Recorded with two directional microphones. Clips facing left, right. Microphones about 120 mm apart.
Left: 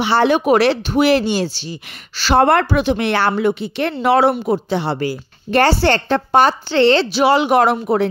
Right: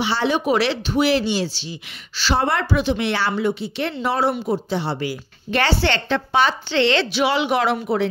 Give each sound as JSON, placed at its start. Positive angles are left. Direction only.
{"t": 0.0, "sound": "speech", "side_deg": 60}
{"t": 5.0, "sound": "a woman's voice", "side_deg": 45}